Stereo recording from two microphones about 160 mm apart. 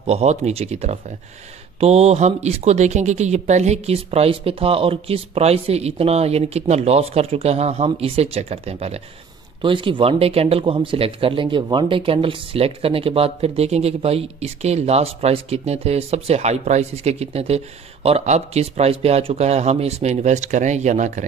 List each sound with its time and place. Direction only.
0.0 s speech: 40° right (ahead or behind)